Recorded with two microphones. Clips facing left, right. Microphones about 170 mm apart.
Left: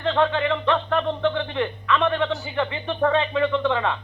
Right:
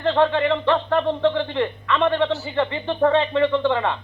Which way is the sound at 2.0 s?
30° right (ahead or behind).